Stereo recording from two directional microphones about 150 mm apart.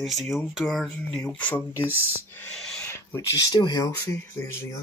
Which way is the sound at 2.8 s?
20° left (ahead or behind).